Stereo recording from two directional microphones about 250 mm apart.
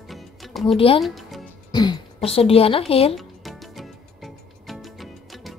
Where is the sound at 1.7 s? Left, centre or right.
Centre.